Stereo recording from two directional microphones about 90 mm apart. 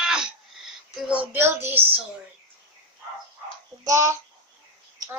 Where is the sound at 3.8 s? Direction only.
35° right (ahead or behind).